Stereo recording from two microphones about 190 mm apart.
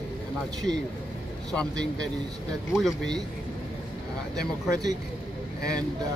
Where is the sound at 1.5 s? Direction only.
5° left (ahead or behind).